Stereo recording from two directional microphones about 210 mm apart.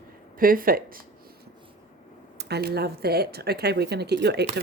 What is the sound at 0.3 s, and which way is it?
Speech, 40° right (ahead or behind).